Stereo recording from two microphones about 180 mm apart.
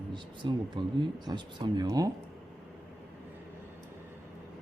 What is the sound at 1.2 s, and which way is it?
Speech, 25° right (ahead or behind).